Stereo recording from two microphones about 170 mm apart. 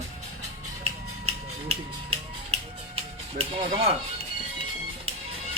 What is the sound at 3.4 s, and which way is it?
Music, 35° right (ahead or behind).